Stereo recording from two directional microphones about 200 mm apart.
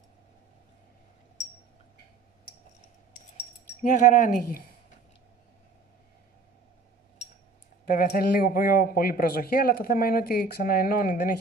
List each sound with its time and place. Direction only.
3.3 s speech: 40° left (ahead or behind)
7.8 s speech: 45° left (ahead or behind)